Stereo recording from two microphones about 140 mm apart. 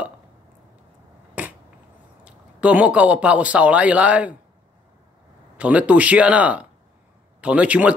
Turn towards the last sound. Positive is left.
turn(degrees=-10)  # may be behind; listen again after turning